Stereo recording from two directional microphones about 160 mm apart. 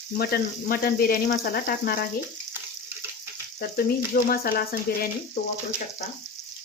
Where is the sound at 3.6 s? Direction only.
70° left (ahead or behind).